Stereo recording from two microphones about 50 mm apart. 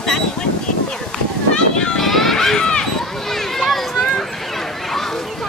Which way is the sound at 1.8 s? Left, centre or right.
Centre.